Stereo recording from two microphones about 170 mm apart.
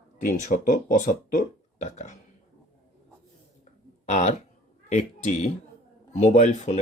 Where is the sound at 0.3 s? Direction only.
50° left (ahead or behind).